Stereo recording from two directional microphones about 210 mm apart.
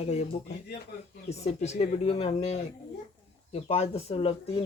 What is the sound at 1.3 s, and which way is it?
A man's voice, 30° left (ahead or behind).